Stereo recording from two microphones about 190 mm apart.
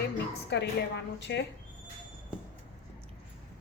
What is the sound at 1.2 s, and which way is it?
Speech, 65° left (ahead or behind).